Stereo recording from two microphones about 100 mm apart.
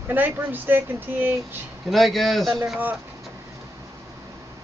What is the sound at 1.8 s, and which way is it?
Speech, centre (ahead or behind).